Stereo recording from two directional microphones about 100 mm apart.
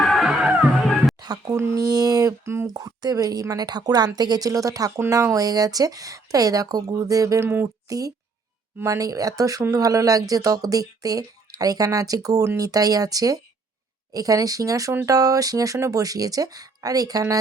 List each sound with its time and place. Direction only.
0.0 s music: centre (ahead or behind)
1.2 s a sound: 40° right (ahead or behind)
1.5 s a woman's voice: 30° right (ahead or behind)
7.9 s a woman's voice: 35° right (ahead or behind)